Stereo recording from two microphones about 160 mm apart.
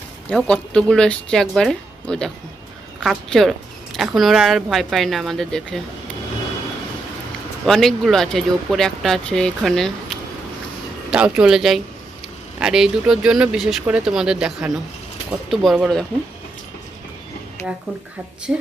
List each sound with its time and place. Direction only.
0.3 s speech: 5° left (ahead or behind)
7.6 s speech: centre (ahead or behind)
17.6 s a sound: 15° left (ahead or behind)